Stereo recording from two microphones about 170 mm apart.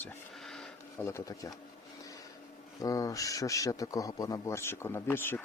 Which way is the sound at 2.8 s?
20° left (ahead or behind).